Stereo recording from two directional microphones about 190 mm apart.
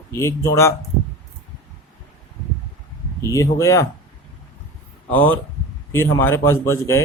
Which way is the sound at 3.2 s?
15° left (ahead or behind).